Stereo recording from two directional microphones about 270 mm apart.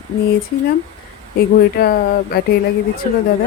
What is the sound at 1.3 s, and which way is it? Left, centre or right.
Speech, left.